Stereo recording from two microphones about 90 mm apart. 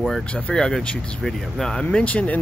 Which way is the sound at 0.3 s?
10° left (ahead or behind).